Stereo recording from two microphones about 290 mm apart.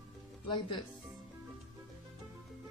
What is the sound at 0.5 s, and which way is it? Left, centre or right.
Speech, centre.